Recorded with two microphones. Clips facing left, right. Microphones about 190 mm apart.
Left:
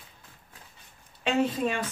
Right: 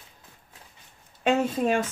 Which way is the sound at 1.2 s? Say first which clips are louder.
Right 3 dB; 45° right (ahead or behind).